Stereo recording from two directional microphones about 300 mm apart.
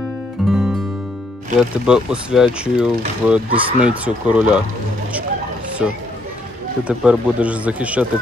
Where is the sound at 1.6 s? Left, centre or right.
Centre.